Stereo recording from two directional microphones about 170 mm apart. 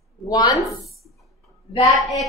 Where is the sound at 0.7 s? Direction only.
Centre (ahead or behind).